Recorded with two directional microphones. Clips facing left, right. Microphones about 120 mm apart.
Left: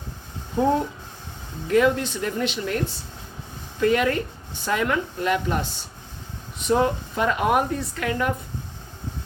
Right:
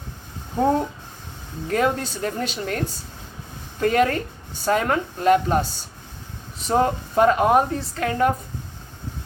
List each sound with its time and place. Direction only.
1.7 s a woman's voice: 40° right (ahead or behind)
6.6 s a woman's voice: 40° right (ahead or behind)